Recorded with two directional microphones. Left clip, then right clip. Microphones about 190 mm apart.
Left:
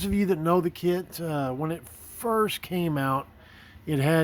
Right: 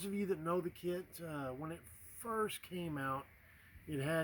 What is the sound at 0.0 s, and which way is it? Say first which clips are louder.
Speech: left 13 dB; 35° left (ahead or behind).